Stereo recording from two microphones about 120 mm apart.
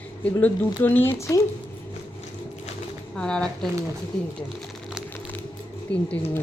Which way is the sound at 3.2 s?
5° left (ahead or behind).